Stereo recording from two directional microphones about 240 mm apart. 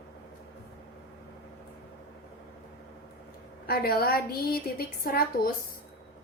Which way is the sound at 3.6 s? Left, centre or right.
Left.